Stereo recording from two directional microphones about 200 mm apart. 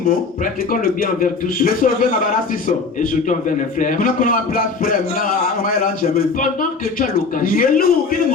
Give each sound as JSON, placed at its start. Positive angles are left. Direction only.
{"t": 0.7, "sound": "a man's voice", "side_deg": 45}